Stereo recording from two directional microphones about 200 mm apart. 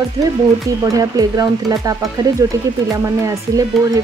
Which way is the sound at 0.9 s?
20° right (ahead or behind).